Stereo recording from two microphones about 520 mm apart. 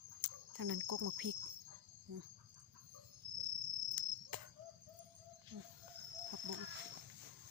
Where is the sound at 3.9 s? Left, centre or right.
Right.